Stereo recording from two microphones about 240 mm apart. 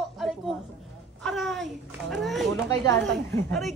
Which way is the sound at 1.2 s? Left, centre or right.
Centre.